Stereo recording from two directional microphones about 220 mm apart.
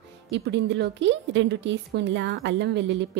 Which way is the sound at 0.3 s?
50° right (ahead or behind).